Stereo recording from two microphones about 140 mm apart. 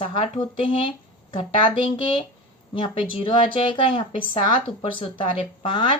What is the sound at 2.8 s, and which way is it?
A woman's voice, 40° left (ahead or behind).